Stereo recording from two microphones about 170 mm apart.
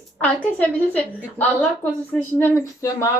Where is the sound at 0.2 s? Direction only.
10° left (ahead or behind).